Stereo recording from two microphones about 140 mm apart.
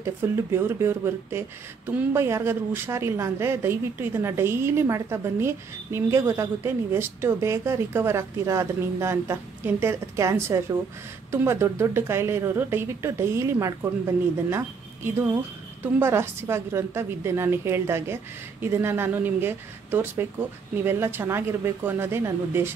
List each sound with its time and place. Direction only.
0.0 s a woman's voice: 15° right (ahead or behind)
15.8 s a woman's voice: 15° right (ahead or behind)